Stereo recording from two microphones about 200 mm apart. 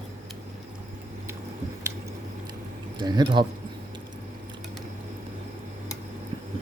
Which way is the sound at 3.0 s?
20° right (ahead or behind).